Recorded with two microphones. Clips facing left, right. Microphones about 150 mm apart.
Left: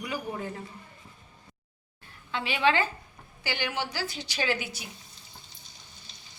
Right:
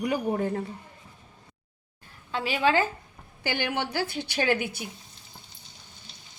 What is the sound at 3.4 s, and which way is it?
A woman's voice, 50° right (ahead or behind).